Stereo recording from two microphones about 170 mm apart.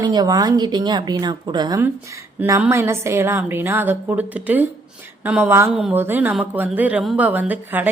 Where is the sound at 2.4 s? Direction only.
10° right (ahead or behind).